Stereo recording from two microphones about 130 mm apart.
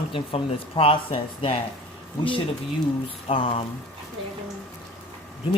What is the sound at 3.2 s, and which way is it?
Speech, 45° left (ahead or behind).